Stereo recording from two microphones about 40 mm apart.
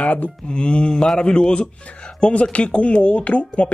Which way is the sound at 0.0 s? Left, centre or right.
Left.